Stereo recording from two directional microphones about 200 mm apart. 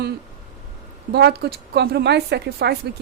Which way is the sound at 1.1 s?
55° right (ahead or behind).